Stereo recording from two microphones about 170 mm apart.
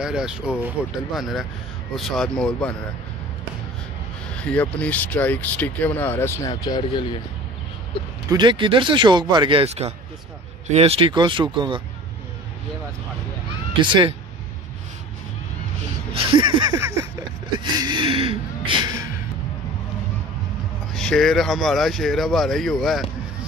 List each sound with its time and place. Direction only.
0.0 s speech: 5° right (ahead or behind)
4.4 s speech: 5° left (ahead or behind); by 7.1 s 25° left (ahead or behind)
8.3 s speech: 25° right (ahead or behind)
13.7 s speech: 30° right (ahead or behind)
16.1 s a sound: 30° right (ahead or behind)
20.9 s speech: 5° left (ahead or behind)